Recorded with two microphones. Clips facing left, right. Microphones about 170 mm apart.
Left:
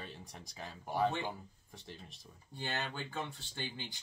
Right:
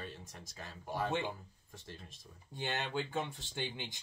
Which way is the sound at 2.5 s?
15° right (ahead or behind).